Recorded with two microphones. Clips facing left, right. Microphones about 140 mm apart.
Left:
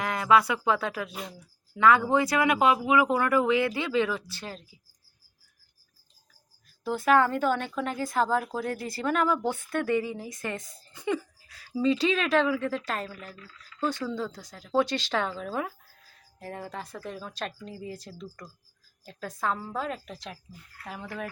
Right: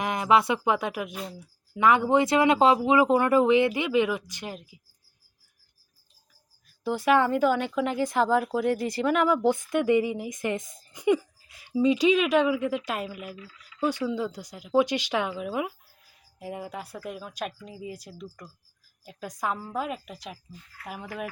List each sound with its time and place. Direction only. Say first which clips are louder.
0.0 s speech: right 1 dB; 20° right (ahead or behind)
6.8 s speech: even; 15° right (ahead or behind)